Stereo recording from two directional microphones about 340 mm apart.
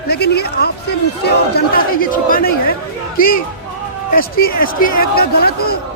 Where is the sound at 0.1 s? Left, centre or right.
Left.